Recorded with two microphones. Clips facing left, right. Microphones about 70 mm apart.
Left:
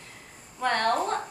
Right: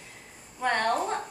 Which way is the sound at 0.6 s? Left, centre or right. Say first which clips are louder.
Left 1 dB; centre.